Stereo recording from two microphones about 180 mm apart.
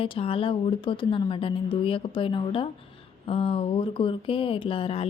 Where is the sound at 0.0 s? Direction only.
30° left (ahead or behind).